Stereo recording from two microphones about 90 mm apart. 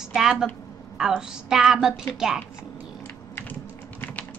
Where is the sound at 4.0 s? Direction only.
15° left (ahead or behind).